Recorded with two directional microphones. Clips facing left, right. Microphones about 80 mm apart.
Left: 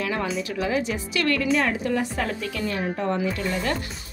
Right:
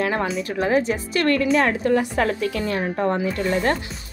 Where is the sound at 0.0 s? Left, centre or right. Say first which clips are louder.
Right 4 dB; right.